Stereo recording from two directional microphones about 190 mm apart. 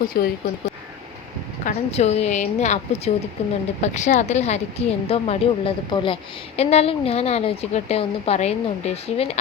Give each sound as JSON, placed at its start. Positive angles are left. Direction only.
{"t": 0.1, "sound": "speech", "side_deg": 55}
{"t": 1.6, "sound": "a woman's voice", "side_deg": 35}